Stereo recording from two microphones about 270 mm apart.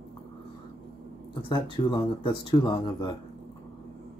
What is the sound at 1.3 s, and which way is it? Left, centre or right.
Speech, centre.